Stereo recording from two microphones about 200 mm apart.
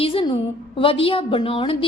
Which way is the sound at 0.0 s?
25° left (ahead or behind).